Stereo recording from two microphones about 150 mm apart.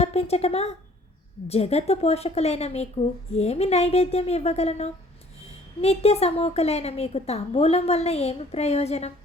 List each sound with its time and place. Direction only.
0.0 s a woman's voice: 45° left (ahead or behind)